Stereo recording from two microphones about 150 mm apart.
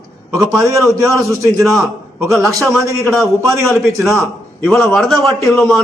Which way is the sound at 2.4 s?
20° right (ahead or behind).